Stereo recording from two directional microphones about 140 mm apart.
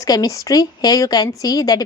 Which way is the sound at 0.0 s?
25° left (ahead or behind).